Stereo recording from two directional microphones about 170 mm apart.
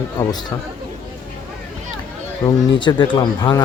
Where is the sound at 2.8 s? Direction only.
25° left (ahead or behind).